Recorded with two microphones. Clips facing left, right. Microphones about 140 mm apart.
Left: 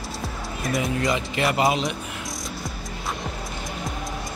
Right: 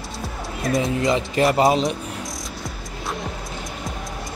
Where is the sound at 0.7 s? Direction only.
25° right (ahead or behind).